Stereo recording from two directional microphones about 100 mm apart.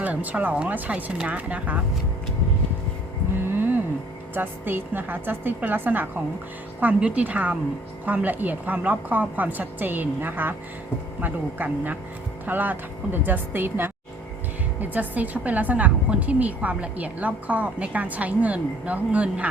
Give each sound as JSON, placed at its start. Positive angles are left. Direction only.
{"t": 0.0, "sound": "a woman's voice", "side_deg": -15}
{"t": 3.4, "sound": "a sound", "side_deg": -20}
{"t": 4.4, "sound": "a woman's voice", "side_deg": -20}